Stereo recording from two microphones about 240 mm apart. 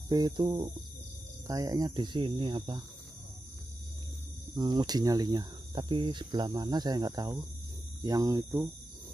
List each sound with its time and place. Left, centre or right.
0.1 s speech: centre
4.6 s speech: centre